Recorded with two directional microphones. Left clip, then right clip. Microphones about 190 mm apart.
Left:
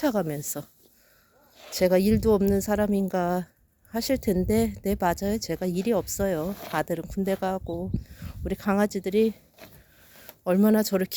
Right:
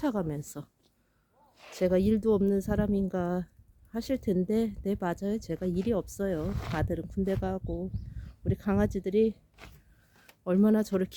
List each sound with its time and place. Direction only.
0.0 s speech: 5° left (ahead or behind)
1.7 s speech: 5° left (ahead or behind)
9.6 s a sound: 50° left (ahead or behind)
10.4 s speech: centre (ahead or behind)